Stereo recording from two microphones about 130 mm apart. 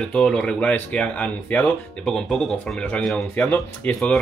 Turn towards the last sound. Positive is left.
turn(degrees=10)  # may be behind; listen again after turning